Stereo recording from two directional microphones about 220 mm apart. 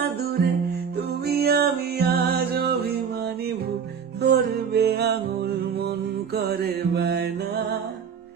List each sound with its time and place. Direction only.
0.2 s music: 45° right (ahead or behind)
4.2 s music: 45° right (ahead or behind)
6.3 s music: 45° right (ahead or behind)